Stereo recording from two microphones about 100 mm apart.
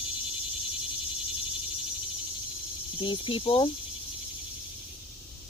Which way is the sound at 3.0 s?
55° left (ahead or behind).